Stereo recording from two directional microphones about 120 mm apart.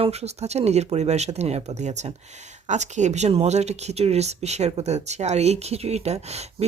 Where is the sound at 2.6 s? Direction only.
75° right (ahead or behind).